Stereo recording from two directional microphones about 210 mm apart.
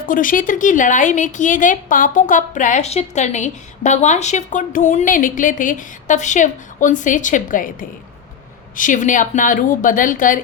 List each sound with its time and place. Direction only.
0.0 s a woman's voice: 40° left (ahead or behind)